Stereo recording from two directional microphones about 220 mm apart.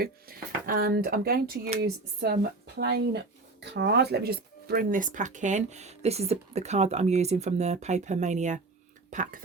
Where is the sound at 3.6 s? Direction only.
50° right (ahead or behind); by 9.3 s 35° right (ahead or behind).